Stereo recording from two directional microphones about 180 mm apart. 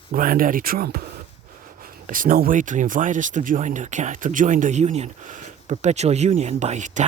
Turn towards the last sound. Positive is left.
turn(degrees=-40)  # may be behind; listen again after turning